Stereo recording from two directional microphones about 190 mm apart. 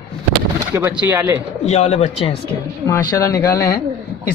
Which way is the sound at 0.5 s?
10° right (ahead or behind).